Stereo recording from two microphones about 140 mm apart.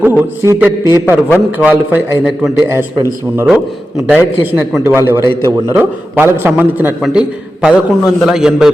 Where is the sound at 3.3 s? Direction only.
5° right (ahead or behind).